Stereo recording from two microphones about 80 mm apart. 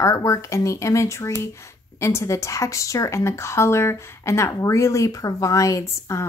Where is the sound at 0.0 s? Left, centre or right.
Left.